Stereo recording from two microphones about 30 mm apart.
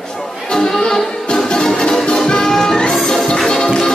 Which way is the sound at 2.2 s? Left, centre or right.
Left.